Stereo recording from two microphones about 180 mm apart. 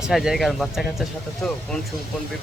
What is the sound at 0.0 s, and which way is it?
Speech, 5° right (ahead or behind).